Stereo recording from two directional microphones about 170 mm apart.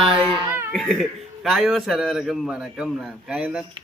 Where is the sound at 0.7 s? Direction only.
5° left (ahead or behind).